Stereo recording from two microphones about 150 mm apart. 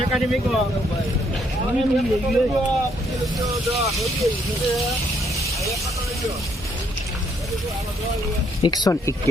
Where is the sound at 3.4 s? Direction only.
20° right (ahead or behind).